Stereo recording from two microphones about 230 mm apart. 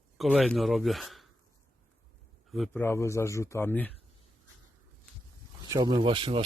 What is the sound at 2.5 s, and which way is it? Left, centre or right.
Speech, centre.